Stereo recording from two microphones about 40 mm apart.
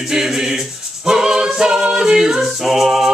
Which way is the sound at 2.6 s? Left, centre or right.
Centre.